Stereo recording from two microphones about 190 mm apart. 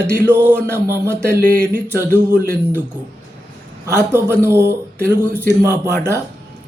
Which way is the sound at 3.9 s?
15° right (ahead or behind).